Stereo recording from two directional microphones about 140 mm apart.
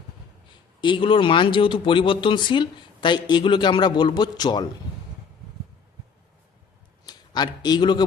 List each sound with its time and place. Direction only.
0.8 s speech: 35° left (ahead or behind)
7.0 s a man's voice: 30° left (ahead or behind)